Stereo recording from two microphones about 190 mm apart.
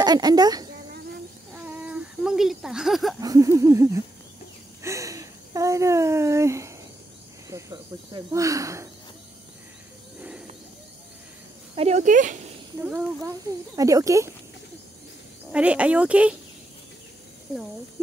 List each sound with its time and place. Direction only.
0.0 s a woman's voice: 20° right (ahead or behind)
1.5 s a sound: 10° right (ahead or behind)
3.2 s speech: 20° right (ahead or behind)
11.7 s speech: 35° right (ahead or behind)
12.8 s speech: 10° right (ahead or behind)
15.5 s speech: 5° right (ahead or behind)